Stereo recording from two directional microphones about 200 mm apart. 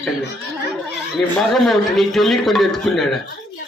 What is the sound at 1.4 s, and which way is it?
A man's voice, centre (ahead or behind).